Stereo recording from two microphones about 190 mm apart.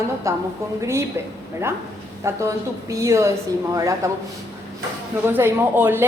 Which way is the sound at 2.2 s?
15° right (ahead or behind).